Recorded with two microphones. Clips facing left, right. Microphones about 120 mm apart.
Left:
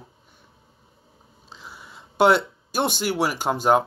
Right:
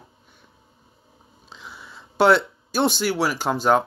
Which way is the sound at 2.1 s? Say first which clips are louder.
Right 1 dB; 20° left (ahead or behind).